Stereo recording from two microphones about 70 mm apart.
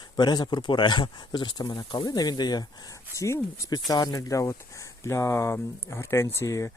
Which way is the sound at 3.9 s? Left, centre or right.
Left.